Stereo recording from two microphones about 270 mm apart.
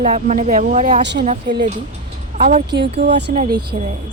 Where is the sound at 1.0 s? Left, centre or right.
Right.